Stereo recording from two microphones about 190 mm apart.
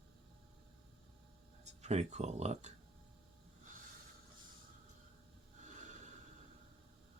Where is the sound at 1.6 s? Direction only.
35° right (ahead or behind).